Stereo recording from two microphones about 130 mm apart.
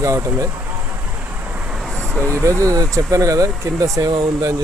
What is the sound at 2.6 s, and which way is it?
Speech, 25° right (ahead or behind).